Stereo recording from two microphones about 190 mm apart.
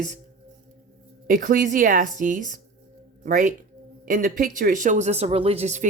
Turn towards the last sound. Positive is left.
turn(degrees=-35)  # may be behind; listen again after turning